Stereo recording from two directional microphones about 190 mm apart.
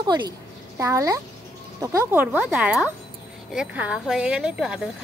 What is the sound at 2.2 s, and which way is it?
Speech, 5° right (ahead or behind).